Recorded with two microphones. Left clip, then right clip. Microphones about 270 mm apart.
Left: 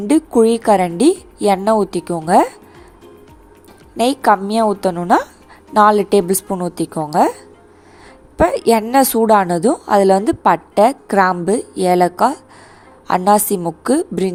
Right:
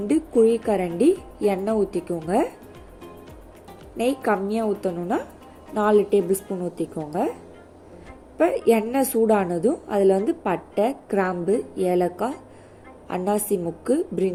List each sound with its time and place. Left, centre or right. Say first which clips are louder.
0.1 s a woman's voice: left 6 dB; left
3.9 s a woman's voice: left 9 dB; left
8.4 s a woman's voice: left 6 dB; left